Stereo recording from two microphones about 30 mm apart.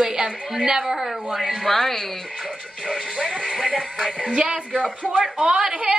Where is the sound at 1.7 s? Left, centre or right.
Centre.